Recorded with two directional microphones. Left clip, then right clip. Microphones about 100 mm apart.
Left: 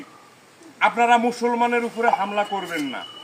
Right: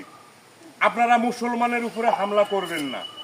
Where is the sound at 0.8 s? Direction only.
35° right (ahead or behind).